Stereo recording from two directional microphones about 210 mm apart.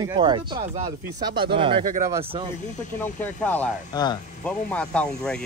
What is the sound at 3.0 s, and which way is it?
Speech, 10° left (ahead or behind).